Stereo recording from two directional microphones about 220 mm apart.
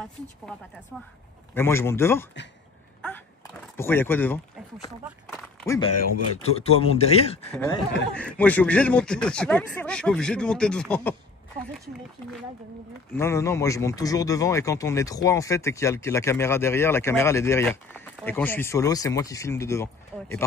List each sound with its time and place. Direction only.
1.5 s speech: 10° left (ahead or behind)
3.7 s speech: 10° left (ahead or behind)
6.4 s speech: 25° left (ahead or behind)
8.1 s speech: 5° left (ahead or behind)
13.1 s speech: 10° left (ahead or behind)